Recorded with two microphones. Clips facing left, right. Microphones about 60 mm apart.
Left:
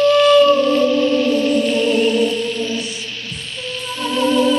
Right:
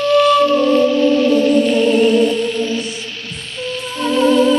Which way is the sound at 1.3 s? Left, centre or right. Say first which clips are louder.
Right 3 dB; right.